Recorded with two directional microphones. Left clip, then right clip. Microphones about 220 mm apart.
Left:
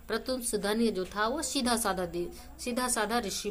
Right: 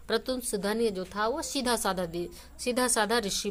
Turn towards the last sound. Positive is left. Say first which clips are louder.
# right 3 dB
turn(degrees=-35)  # may be behind; listen again after turning